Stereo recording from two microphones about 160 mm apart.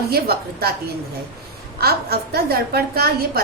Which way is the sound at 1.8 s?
75° right (ahead or behind).